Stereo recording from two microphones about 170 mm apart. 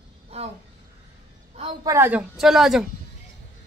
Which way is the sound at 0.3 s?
40° right (ahead or behind).